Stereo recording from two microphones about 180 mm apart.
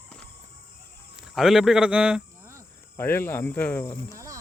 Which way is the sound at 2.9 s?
10° left (ahead or behind).